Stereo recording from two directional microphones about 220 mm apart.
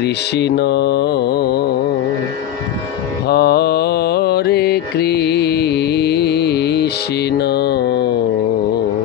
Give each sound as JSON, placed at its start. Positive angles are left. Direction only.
{"t": 0.0, "sound": "music", "side_deg": 50}
{"t": 3.3, "sound": "mantra", "side_deg": 45}
{"t": 7.3, "sound": "music", "side_deg": 45}